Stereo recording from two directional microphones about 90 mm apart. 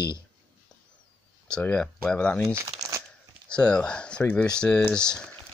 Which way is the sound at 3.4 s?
10° left (ahead or behind).